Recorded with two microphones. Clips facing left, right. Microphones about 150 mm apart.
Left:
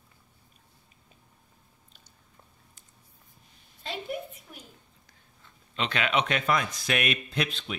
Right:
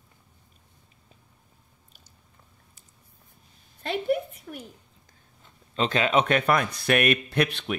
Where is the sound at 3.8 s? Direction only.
65° right (ahead or behind).